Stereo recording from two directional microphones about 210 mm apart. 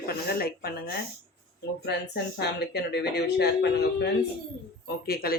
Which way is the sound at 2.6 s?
50° left (ahead or behind).